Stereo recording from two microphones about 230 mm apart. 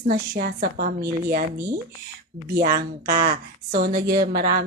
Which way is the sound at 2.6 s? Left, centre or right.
Right.